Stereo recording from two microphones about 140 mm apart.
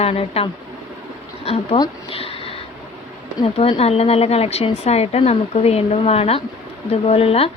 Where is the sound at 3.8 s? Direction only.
45° left (ahead or behind).